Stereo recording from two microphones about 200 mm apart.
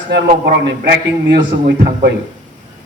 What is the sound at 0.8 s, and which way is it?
A man's voice, 55° right (ahead or behind).